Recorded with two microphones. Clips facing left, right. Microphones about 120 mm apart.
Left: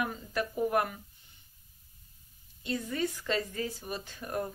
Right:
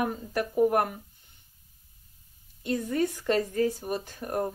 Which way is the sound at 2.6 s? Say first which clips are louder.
Right 5 dB; 45° right (ahead or behind).